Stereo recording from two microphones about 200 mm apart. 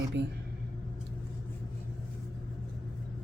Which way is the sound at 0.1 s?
60° right (ahead or behind).